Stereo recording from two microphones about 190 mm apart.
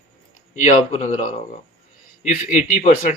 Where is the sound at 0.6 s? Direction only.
35° left (ahead or behind).